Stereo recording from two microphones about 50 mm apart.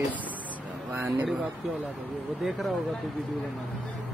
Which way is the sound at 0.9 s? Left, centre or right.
Right.